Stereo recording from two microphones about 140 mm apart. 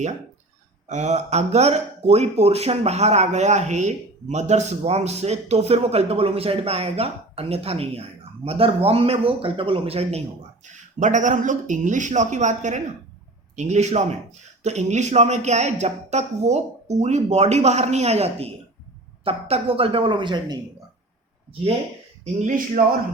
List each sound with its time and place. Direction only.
0.9 s speech: 55° right (ahead or behind)
11.0 s a woman's voice: 60° right (ahead or behind); by 20.6 s 35° right (ahead or behind)
22.2 s a woman's voice: 65° right (ahead or behind)